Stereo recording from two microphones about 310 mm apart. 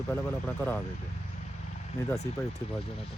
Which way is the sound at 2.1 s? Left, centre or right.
Left.